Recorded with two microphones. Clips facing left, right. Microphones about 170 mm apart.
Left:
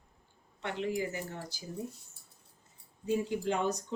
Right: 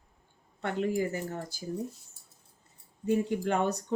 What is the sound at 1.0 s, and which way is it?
Speech, 45° right (ahead or behind).